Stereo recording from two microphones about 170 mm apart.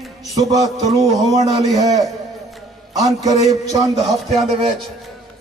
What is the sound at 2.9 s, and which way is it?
Speech, 20° right (ahead or behind).